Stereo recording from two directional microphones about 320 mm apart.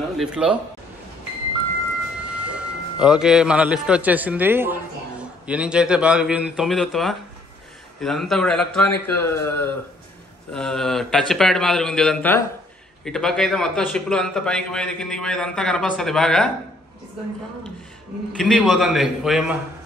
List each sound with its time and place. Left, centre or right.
0.2 s a man's voice: centre
2.3 s a man's voice: centre
18.4 s a man's voice: centre